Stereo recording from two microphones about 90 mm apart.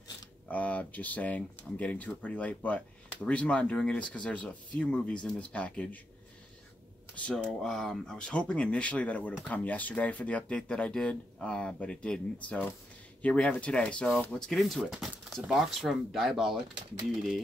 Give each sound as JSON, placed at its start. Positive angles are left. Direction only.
{"t": 0.5, "sound": "speech", "side_deg": 15}
{"t": 7.2, "sound": "speech", "side_deg": 5}